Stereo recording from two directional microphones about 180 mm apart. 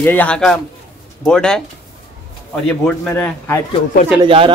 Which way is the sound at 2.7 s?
5° left (ahead or behind).